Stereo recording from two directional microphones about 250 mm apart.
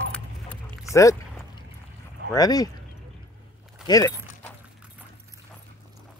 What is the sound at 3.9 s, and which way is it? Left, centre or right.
Keys jangling, centre.